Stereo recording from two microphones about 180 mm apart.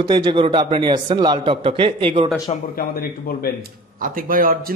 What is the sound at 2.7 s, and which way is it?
Speech, 55° left (ahead or behind).